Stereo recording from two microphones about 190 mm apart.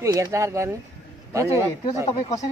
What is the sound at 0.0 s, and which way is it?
Speech, 15° right (ahead or behind).